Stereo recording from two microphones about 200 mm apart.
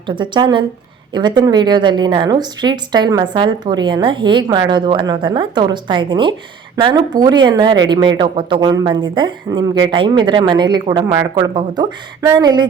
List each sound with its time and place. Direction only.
0.1 s a woman's voice: 20° right (ahead or behind)